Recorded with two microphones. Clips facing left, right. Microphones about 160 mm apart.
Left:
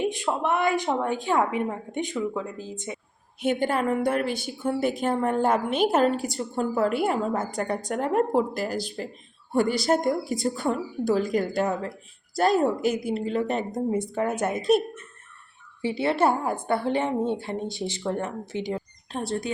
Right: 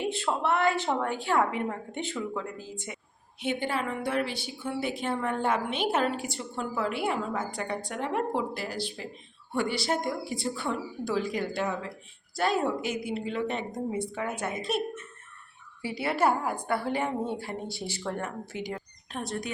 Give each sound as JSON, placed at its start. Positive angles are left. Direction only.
{"t": 0.0, "sound": "a woman's voice", "side_deg": 15}
{"t": 3.4, "sound": "a woman's voice", "side_deg": 45}
{"t": 15.8, "sound": "a woman's voice", "side_deg": 25}